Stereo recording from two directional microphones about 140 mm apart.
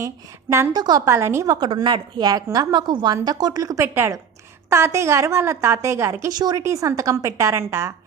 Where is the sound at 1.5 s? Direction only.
35° right (ahead or behind).